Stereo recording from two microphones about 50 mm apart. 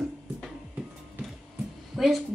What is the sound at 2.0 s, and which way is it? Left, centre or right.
Speech, centre.